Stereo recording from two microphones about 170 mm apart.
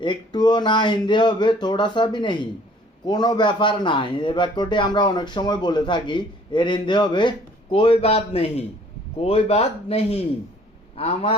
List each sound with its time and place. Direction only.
0.0 s a man's voice: 25° left (ahead or behind)